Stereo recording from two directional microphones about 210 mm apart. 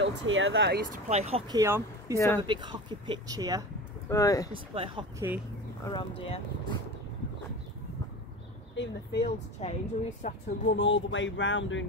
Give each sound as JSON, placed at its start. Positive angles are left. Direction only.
{"t": 0.0, "sound": "speech", "side_deg": -65}
{"t": 1.0, "sound": "speech", "side_deg": -30}
{"t": 1.5, "sound": "speech", "side_deg": -15}
{"t": 2.1, "sound": "speech", "side_deg": 15}
{"t": 2.4, "sound": "speech", "side_deg": -20}
{"t": 4.1, "sound": "speech", "side_deg": 15}
{"t": 4.7, "sound": "speech", "side_deg": -25}
{"t": 5.9, "sound": "speech", "side_deg": 25}
{"t": 8.7, "sound": "speech", "side_deg": 50}
{"t": 9.6, "sound": "a woman's voice", "side_deg": 30}
{"t": 10.8, "sound": "speech", "side_deg": 60}